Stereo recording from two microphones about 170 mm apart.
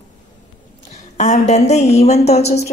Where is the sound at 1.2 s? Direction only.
40° left (ahead or behind).